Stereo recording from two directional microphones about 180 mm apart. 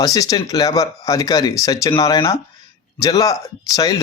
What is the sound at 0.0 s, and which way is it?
Speech, 20° left (ahead or behind).